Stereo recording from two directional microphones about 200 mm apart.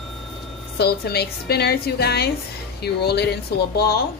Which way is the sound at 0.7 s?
55° left (ahead or behind).